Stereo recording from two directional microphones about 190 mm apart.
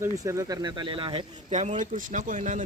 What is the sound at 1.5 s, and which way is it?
Speech, 35° right (ahead or behind).